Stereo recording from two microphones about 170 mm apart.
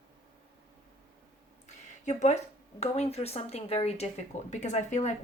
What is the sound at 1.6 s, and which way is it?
A woman's voice, 45° left (ahead or behind).